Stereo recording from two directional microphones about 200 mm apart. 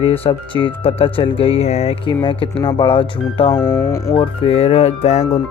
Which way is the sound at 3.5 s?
10° left (ahead or behind).